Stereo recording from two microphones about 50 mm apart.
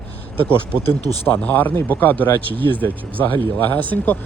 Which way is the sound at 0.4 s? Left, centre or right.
Left.